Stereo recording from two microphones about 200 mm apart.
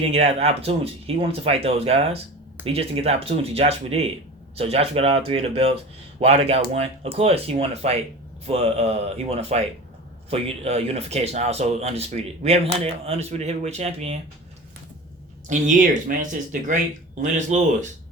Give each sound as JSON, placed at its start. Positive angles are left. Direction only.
{"t": 0.0, "sound": "speech", "side_deg": -30}
{"t": 15.4, "sound": "speech", "side_deg": -40}